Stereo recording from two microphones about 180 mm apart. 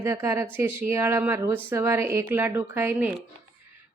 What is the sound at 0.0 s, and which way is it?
A woman's voice, 15° right (ahead or behind).